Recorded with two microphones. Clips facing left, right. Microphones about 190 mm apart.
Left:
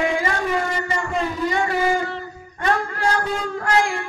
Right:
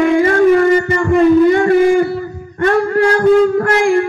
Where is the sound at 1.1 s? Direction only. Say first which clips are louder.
Right 17 dB; 55° right (ahead or behind).